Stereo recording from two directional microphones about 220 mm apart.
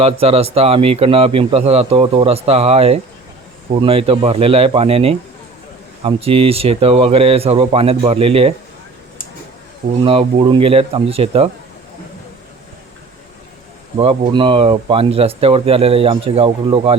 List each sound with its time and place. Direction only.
0.0 s a man's voice: 25° right (ahead or behind)
10.0 s a man's voice: 25° right (ahead or behind)
14.0 s a man's voice: 25° right (ahead or behind)